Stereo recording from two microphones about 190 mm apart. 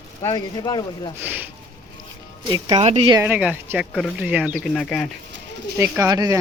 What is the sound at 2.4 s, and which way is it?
Speech, 25° right (ahead or behind).